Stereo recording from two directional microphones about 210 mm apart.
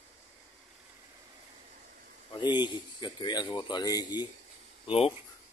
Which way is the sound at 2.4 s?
20° left (ahead or behind).